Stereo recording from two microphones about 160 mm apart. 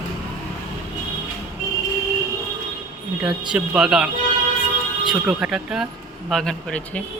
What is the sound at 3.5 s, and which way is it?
Speech, 5° right (ahead or behind).